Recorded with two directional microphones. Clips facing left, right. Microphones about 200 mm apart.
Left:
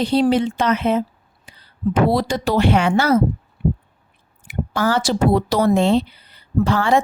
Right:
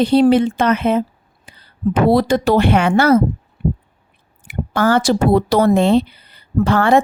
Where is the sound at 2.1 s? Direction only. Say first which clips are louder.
Right 5 dB; 55° right (ahead or behind).